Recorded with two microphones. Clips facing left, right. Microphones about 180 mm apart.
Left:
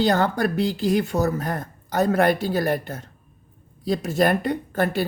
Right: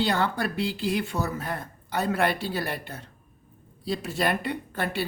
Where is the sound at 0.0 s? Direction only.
40° left (ahead or behind).